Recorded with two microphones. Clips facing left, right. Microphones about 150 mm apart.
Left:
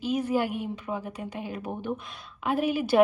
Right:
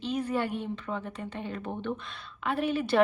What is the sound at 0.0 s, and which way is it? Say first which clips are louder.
A woman's voice: left 3 dB; 5° left (ahead or behind).